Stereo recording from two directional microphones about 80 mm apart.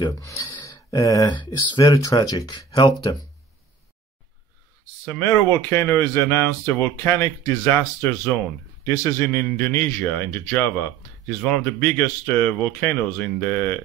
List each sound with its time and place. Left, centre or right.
0.2 s speech: left
2.7 s speech: left
5.2 s speech: left
8.8 s speech: left
9.2 s speech: left